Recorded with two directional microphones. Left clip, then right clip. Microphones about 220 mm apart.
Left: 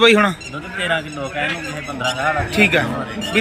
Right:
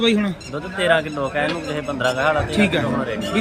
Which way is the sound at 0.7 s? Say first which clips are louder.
Right 3 dB; 25° right (ahead or behind).